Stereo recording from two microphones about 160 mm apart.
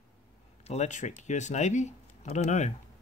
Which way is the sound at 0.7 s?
50° left (ahead or behind).